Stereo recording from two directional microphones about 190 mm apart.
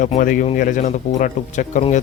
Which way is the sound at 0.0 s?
45° left (ahead or behind).